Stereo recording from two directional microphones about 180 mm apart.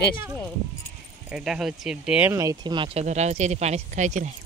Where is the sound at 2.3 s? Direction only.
20° right (ahead or behind); by 4.3 s 40° right (ahead or behind).